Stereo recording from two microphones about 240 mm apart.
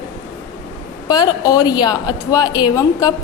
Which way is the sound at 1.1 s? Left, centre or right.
Centre.